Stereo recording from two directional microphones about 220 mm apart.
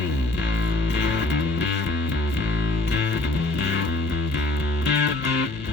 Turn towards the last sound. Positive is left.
turn(degrees=50)  # may be behind; listen again after turning